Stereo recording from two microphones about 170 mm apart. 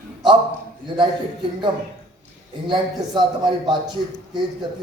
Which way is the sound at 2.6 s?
25° right (ahead or behind).